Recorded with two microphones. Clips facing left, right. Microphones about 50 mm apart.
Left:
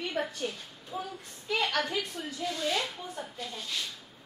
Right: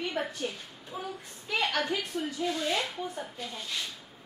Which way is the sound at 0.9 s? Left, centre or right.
Centre.